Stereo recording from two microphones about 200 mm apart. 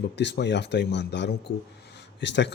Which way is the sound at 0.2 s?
60° left (ahead or behind).